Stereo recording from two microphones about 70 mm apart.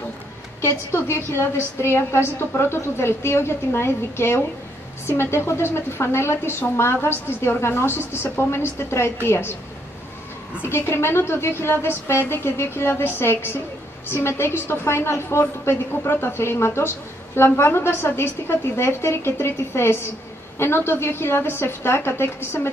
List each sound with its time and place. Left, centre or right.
0.9 s a woman's voice: left
10.6 s a woman's voice: left